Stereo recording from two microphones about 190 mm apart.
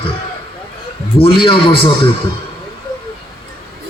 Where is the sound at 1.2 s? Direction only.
25° left (ahead or behind).